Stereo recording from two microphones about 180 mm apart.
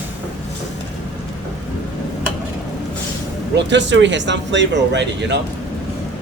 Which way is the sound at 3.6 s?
75° right (ahead or behind).